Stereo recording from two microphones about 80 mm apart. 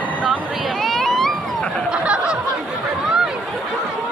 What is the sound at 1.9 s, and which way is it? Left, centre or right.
Snicker, centre.